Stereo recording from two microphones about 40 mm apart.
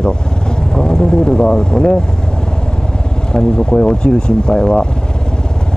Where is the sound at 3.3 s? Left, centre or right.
Centre.